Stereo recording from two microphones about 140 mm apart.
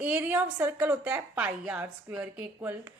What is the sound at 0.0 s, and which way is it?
A woman's voice, 10° right (ahead or behind).